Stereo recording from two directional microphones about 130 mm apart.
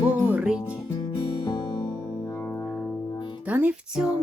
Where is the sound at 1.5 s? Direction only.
35° left (ahead or behind).